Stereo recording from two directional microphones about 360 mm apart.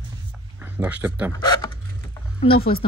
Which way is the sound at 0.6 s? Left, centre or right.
Centre.